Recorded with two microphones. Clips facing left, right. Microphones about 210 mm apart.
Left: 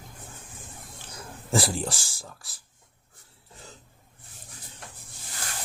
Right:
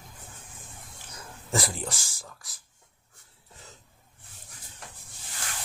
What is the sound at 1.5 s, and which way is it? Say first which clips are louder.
Speech: left 4 dB; 30° left (ahead or behind).